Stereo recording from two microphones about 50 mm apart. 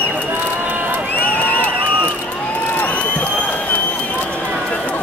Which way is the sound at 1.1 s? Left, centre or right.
Left.